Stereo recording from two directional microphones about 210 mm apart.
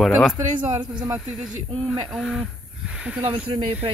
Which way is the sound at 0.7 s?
20° right (ahead or behind).